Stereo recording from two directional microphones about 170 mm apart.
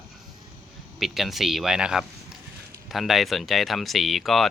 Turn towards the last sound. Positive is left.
turn(degrees=0)  # may be behind; listen again after turning